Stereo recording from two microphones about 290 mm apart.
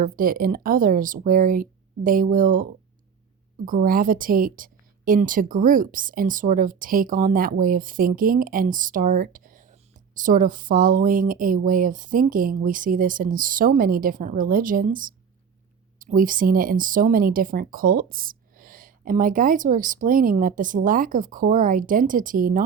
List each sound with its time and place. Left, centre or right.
0.0 s a woman's voice: right
3.7 s a woman's voice: right